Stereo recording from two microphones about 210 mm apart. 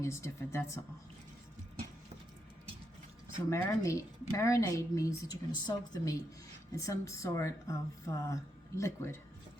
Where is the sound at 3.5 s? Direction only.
15° left (ahead or behind).